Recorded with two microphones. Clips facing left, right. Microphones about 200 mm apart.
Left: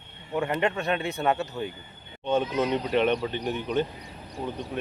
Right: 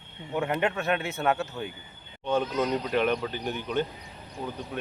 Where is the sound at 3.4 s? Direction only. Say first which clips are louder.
Left 2 dB; 30° left (ahead or behind).